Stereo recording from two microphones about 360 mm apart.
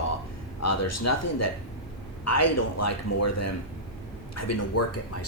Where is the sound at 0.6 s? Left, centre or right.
Left.